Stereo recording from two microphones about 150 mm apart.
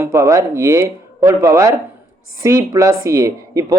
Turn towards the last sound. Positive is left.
turn(degrees=-20)  # may be behind; listen again after turning